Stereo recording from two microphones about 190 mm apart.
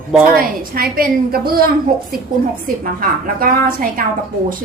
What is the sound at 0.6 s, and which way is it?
A woman's voice, 50° right (ahead or behind).